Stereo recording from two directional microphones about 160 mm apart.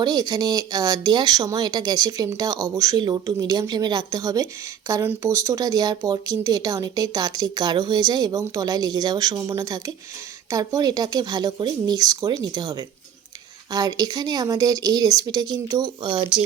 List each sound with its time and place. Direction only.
0.0 s speech: 25° right (ahead or behind)